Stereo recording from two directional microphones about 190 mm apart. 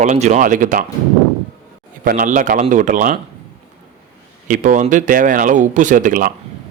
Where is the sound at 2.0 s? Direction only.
45° right (ahead or behind).